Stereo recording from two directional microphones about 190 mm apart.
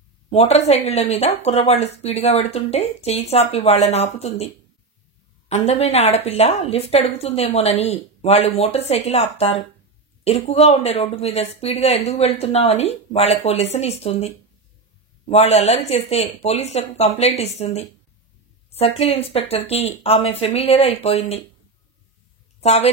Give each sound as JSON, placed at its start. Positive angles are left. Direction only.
{"t": 0.3, "sound": "speech", "side_deg": 35}
{"t": 5.5, "sound": "speech", "side_deg": 35}
{"t": 22.6, "sound": "a woman's voice", "side_deg": 35}